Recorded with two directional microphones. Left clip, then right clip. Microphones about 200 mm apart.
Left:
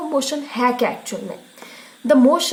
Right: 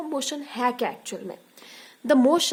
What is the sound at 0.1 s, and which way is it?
A woman's voice, 45° right (ahead or behind).